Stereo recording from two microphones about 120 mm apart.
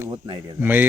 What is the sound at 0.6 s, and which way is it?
Speech, 15° right (ahead or behind).